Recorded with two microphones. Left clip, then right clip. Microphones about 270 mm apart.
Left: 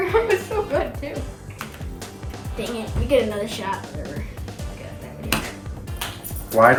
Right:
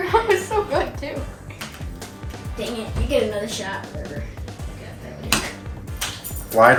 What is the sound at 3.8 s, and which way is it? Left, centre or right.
Speech, centre.